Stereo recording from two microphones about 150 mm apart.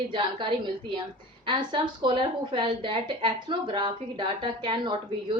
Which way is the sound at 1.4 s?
35° right (ahead or behind).